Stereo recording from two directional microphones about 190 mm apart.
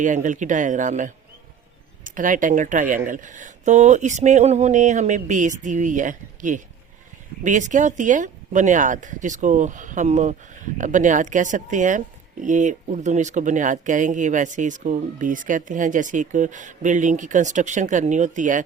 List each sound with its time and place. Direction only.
0.0 s speech: 40° right (ahead or behind)